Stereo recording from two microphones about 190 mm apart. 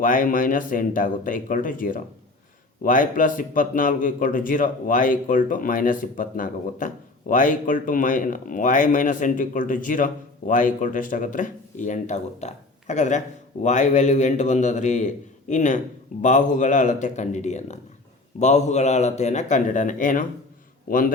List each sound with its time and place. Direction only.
0.0 s a man's voice: 45° left (ahead or behind)